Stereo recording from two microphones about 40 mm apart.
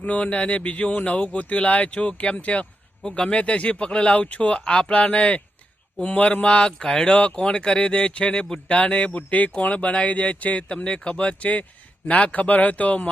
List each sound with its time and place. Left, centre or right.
0.0 s speech: left